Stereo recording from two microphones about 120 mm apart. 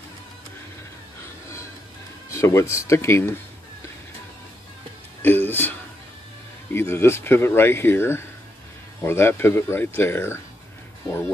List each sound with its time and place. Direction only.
2.2 s speech: 25° left (ahead or behind)
5.2 s speech: 15° left (ahead or behind)